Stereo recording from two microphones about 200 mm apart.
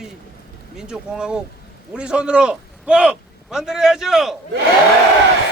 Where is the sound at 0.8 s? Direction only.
5° right (ahead or behind).